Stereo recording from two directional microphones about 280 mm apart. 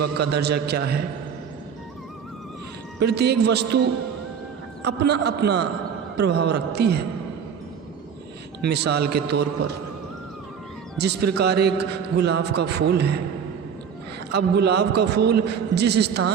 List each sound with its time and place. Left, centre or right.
0.0 s a man's voice: right
3.0 s a man's voice: right
8.6 s a man's voice: right
10.9 s a man's voice: right
14.3 s a man's voice: right